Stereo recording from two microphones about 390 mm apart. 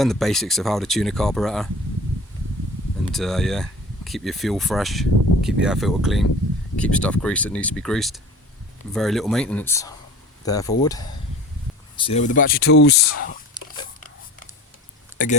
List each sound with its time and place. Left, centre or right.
0.0 s speech: centre
3.1 s speech: centre; by 13.3 s left
13.6 s pig: centre